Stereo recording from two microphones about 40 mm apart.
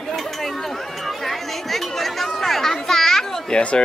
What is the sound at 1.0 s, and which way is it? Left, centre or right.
Chatter, centre.